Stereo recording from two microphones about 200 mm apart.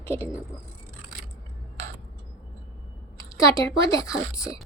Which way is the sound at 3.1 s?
15° left (ahead or behind).